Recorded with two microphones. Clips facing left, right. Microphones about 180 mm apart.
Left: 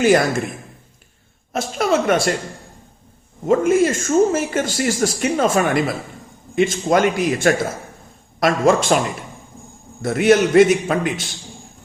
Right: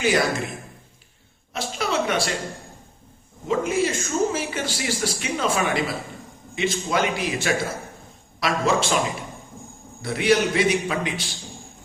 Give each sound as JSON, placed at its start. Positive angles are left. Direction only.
{"t": 0.0, "sound": "speech", "side_deg": 50}
{"t": 1.5, "sound": "speech", "side_deg": 50}
{"t": 3.4, "sound": "speech", "side_deg": 50}
{"t": 10.0, "sound": "speech", "side_deg": 50}